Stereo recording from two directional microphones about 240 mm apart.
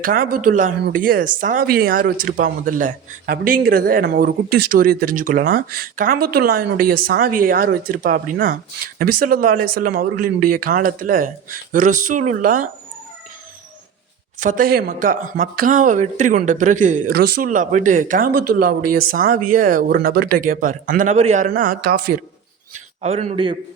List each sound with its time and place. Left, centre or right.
0.0 s speech: right
4.4 s speech: right
4.7 s speech: right
14.3 s speech: right
22.7 s a man's voice: right